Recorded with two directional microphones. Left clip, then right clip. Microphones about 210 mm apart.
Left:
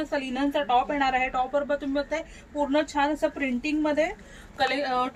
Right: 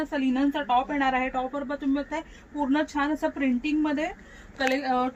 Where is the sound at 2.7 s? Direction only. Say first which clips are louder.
Left 1 dB; 15° left (ahead or behind).